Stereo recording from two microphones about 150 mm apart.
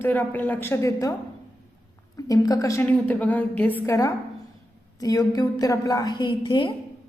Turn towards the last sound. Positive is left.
turn(degrees=30)  # may be behind; listen again after turning